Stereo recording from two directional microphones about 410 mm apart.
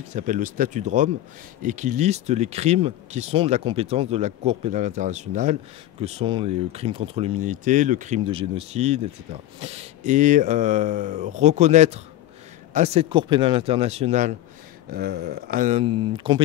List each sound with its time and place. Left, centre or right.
0.1 s speech: centre